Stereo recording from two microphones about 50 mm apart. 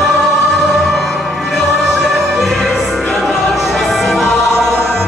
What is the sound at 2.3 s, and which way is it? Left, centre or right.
Opera, centre.